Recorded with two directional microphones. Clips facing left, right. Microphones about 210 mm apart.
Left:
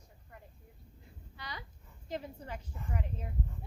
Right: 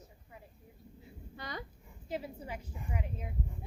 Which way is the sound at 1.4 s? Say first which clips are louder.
Right 4 dB; 50° right (ahead or behind).